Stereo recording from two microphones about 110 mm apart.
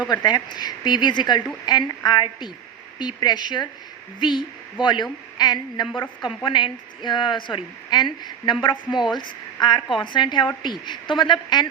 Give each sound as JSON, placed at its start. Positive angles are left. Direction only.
{"t": 0.1, "sound": "a woman's voice", "side_deg": 40}